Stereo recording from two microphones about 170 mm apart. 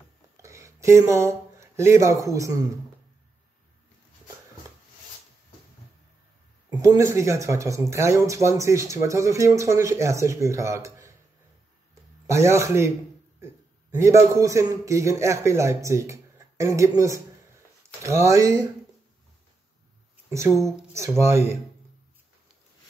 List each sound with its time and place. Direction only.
0.4 s a sound: 20° right (ahead or behind)
2.2 s speech: 20° right (ahead or behind)
6.7 s speech: 20° right (ahead or behind)
12.3 s speech: 15° right (ahead or behind)
13.9 s speech: 15° right (ahead or behind)
20.2 s speech: 15° right (ahead or behind)